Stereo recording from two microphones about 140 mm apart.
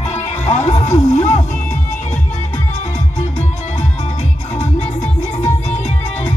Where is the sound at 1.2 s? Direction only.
60° left (ahead or behind).